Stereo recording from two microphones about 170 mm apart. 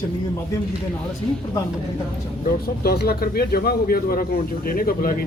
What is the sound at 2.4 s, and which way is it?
Speech, 65° left (ahead or behind).